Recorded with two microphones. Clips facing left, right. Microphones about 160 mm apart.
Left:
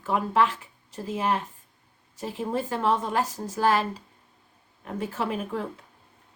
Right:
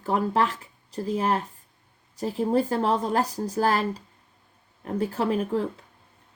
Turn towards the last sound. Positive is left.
turn(degrees=-35)  # may be behind; listen again after turning